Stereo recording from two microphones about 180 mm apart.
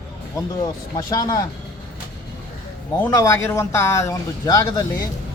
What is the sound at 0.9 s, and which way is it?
Speech, 20° left (ahead or behind).